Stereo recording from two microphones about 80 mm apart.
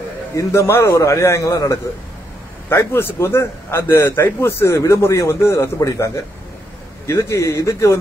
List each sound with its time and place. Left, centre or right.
0.4 s a man's voice: left
2.7 s a man's voice: left
5.8 s a man's voice: left